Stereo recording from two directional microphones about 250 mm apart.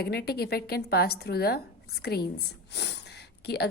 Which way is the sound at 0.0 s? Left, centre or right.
Left.